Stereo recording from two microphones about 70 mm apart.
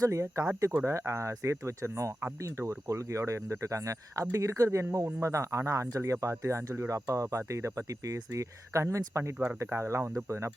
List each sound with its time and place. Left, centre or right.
0.0 s speech: right